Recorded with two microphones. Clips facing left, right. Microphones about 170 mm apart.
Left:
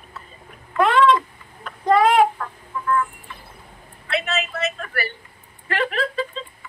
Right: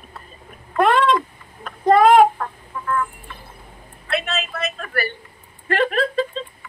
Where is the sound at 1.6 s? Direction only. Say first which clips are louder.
Right 3 dB; 50° right (ahead or behind).